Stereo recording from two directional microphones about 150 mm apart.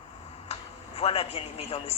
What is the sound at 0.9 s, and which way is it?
A man's voice, 40° left (ahead or behind).